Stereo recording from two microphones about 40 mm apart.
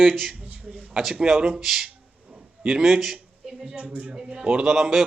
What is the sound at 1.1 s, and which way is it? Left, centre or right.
A man's voice, right.